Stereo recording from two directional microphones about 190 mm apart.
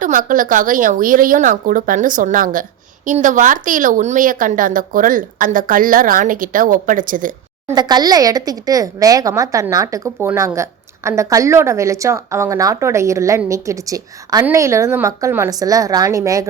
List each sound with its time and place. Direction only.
0.0 s speech: 45° right (ahead or behind)
7.7 s a woman's voice: 20° right (ahead or behind)